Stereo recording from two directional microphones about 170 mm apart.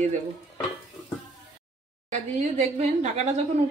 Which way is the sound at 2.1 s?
40° right (ahead or behind).